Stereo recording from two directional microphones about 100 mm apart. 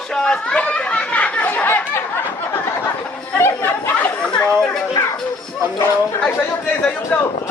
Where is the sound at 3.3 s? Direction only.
20° left (ahead or behind).